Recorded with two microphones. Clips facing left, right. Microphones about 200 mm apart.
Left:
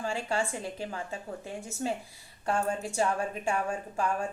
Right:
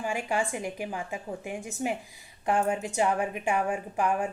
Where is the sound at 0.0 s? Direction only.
15° right (ahead or behind).